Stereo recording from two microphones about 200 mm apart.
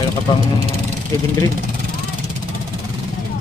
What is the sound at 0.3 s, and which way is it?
Speech, 20° left (ahead or behind).